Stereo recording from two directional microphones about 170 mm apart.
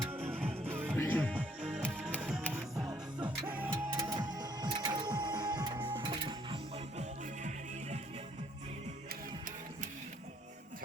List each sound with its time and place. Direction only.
0.3 s music: 10° right (ahead or behind)
0.9 s music: 10° left (ahead or behind)
1.4 s music: 5° right (ahead or behind)
2.8 s music: 25° right (ahead or behind)
3.4 s music: 10° right (ahead or behind)
3.8 s music: 25° right (ahead or behind)